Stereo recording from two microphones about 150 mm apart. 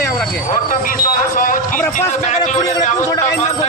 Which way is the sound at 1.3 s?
65° left (ahead or behind).